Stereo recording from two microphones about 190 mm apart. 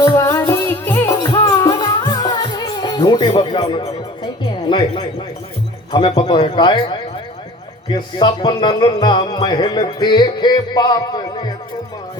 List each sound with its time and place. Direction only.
0.0 s music: 15° left (ahead or behind)
5.9 s music: 25° left (ahead or behind)